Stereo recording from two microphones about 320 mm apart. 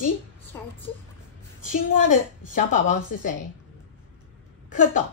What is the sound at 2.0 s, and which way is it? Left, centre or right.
A woman's voice, left.